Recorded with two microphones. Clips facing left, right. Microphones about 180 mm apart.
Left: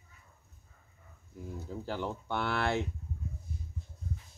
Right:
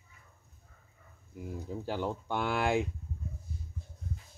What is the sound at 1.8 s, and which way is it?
Speech, 15° right (ahead or behind).